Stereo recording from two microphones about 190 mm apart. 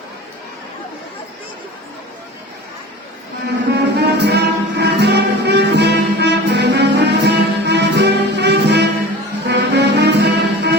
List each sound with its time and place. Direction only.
3.7 s music: 60° right (ahead or behind)